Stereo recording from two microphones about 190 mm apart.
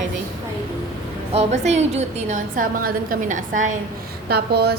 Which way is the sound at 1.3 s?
35° right (ahead or behind).